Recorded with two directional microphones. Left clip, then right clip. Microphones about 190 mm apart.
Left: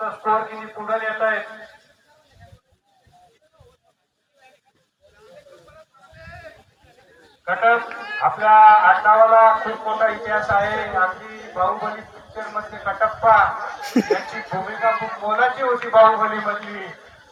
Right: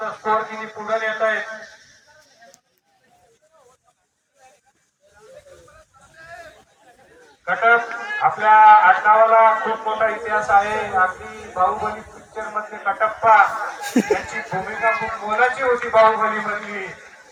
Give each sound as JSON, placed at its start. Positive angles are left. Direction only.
{"t": 0.0, "sound": "a man's voice", "side_deg": -30}
{"t": 6.1, "sound": "a sound", "side_deg": -25}
{"t": 7.4, "sound": "a man's voice", "side_deg": -30}